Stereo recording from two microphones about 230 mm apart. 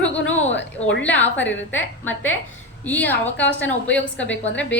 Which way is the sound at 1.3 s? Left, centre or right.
Left.